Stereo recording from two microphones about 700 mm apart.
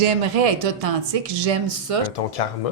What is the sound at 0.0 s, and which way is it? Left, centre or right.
Speech, right.